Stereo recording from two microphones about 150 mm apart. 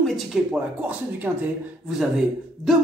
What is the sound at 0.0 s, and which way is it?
Speech, centre (ahead or behind).